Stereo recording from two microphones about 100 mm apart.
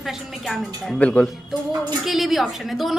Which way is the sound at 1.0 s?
15° left (ahead or behind).